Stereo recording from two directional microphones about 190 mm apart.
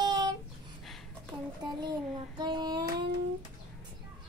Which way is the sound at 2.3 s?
25° right (ahead or behind).